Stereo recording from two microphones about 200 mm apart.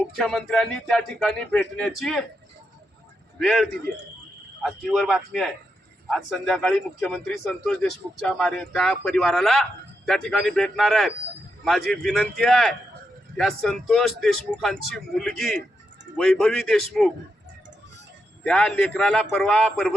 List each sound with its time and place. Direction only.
0.1 s speech: centre (ahead or behind)
3.3 s speech: centre (ahead or behind)
18.4 s speech: 5° left (ahead or behind)